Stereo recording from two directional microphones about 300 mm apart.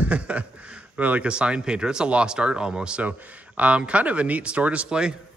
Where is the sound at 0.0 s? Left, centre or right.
Centre.